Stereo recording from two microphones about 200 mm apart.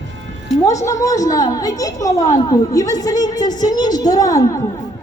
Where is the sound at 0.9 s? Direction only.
15° left (ahead or behind).